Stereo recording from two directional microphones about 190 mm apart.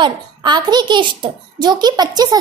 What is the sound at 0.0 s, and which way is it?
A child's voice, 25° right (ahead or behind).